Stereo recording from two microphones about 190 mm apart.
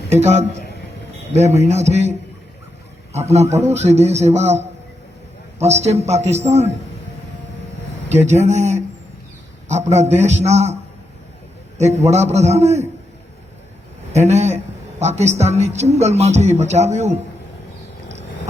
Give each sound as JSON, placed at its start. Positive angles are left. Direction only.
{"t": 0.2, "sound": "speech", "side_deg": -35}
{"t": 8.3, "sound": "speech", "side_deg": -35}
{"t": 11.8, "sound": "speech", "side_deg": -35}
{"t": 14.1, "sound": "speech", "side_deg": -35}